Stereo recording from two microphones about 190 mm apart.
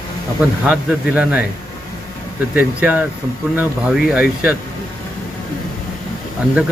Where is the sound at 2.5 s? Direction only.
10° right (ahead or behind).